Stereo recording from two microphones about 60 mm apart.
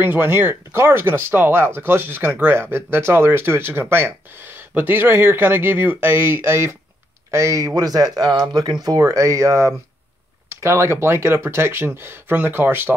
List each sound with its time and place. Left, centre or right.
0.0 s speech: right
7.2 s speech: right
8.8 s speech: right